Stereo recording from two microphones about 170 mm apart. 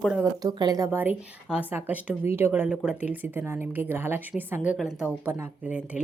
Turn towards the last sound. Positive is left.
turn(degrees=-10)  # may be behind; listen again after turning